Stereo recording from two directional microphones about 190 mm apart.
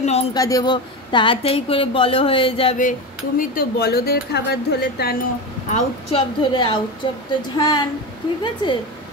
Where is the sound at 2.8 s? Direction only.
45° left (ahead or behind).